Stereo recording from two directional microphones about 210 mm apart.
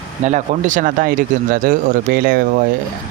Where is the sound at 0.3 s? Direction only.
35° right (ahead or behind).